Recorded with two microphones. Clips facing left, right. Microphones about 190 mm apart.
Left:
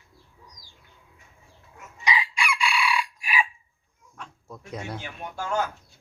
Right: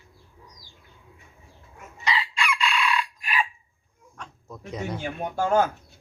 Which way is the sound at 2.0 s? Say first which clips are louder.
Even; 15° left (ahead or behind).